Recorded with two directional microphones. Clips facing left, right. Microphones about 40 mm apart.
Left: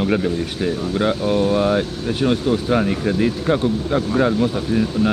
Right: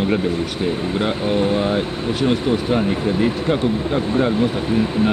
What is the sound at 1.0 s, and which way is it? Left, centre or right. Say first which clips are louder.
Speech: left 2 dB; centre.